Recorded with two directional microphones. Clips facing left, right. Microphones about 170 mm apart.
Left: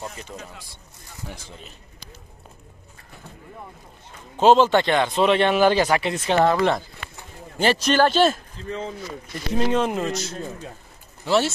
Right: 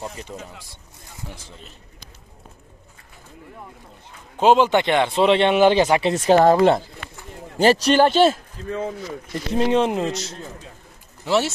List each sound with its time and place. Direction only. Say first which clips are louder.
4.4 s a man's voice: even; 10° right (ahead or behind)
6.1 s speech: right 6 dB; 40° right (ahead or behind)
8.0 s a man's voice: right 2 dB; 25° right (ahead or behind)